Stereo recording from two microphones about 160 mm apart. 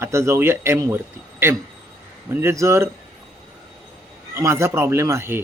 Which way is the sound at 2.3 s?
15° right (ahead or behind).